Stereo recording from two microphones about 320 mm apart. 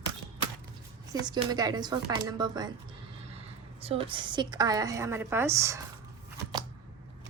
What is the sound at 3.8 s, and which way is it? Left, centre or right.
A woman's voice, centre.